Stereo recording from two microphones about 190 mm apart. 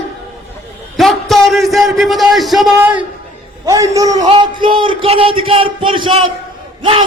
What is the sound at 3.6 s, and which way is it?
A man's voice, 15° right (ahead or behind).